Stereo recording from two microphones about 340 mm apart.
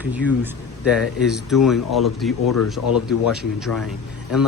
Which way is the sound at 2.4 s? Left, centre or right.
Left.